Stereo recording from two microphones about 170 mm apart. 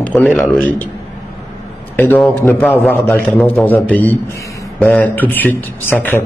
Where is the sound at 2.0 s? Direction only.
10° left (ahead or behind).